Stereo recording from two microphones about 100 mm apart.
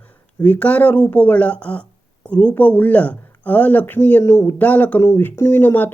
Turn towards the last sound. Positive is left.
turn(degrees=20)  # may be behind; listen again after turning